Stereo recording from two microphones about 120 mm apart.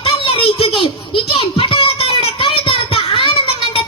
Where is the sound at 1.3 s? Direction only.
45° left (ahead or behind).